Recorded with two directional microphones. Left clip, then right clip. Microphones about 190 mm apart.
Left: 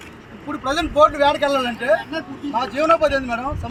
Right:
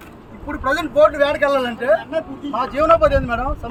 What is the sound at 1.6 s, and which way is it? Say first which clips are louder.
Speech: right 1 dB; 25° right (ahead or behind).